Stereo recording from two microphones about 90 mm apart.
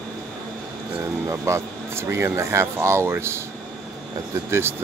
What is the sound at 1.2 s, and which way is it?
Speech, 30° right (ahead or behind).